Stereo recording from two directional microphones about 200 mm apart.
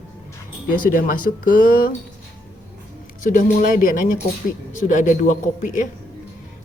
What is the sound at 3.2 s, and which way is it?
Speech, 40° left (ahead or behind).